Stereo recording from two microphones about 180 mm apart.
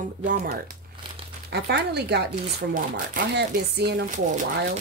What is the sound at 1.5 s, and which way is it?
Speech, 65° right (ahead or behind).